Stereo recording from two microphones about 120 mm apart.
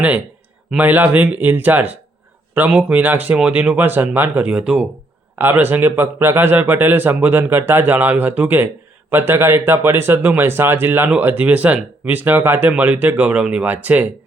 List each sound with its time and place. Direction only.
0.8 s a man's voice: 15° right (ahead or behind)